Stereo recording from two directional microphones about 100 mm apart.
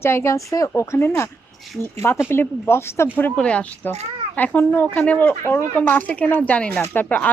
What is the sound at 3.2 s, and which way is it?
Speech, 15° left (ahead or behind).